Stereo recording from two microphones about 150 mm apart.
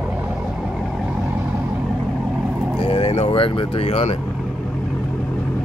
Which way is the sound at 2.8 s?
40° left (ahead or behind).